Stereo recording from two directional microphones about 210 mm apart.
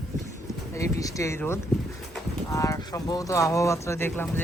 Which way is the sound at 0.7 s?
15° left (ahead or behind).